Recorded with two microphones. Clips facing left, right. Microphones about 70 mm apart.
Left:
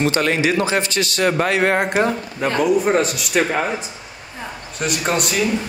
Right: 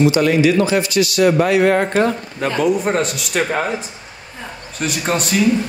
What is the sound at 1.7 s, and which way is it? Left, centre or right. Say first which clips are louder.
Speech: right 2 dB; centre.